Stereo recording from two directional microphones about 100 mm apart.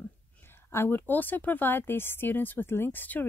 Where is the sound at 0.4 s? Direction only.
25° left (ahead or behind).